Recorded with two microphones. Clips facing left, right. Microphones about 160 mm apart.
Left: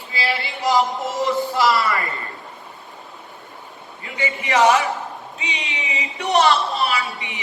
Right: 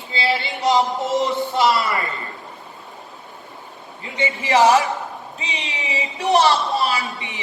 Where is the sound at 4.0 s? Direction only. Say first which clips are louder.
Right 2 dB; 25° right (ahead or behind).